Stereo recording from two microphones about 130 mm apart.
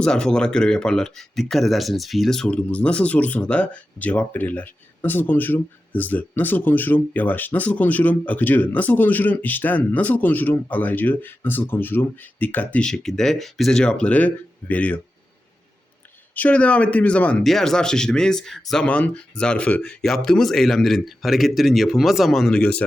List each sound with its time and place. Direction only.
0.0 s speech: 5° left (ahead or behind)
16.3 s speech: 10° left (ahead or behind)